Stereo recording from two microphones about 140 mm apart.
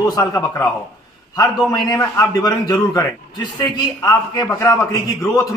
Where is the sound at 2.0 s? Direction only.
25° left (ahead or behind).